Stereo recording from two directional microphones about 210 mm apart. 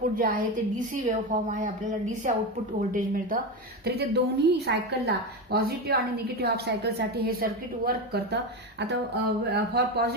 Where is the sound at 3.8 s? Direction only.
50° right (ahead or behind).